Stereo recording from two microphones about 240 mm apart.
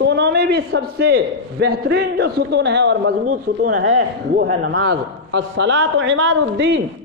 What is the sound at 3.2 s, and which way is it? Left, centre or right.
Speech, right.